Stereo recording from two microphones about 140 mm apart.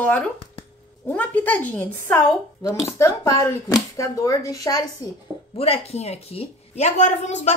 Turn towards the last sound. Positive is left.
turn(degrees=55)  # may be behind; listen again after turning